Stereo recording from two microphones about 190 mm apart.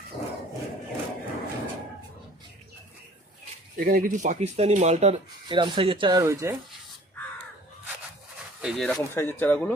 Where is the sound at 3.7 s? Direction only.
50° right (ahead or behind); by 6.5 s 15° right (ahead or behind).